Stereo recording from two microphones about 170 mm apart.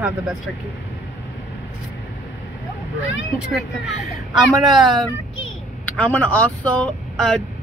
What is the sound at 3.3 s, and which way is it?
Speech, 5° right (ahead or behind).